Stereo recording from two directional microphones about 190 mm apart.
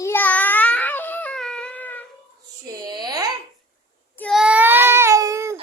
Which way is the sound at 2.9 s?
20° right (ahead or behind).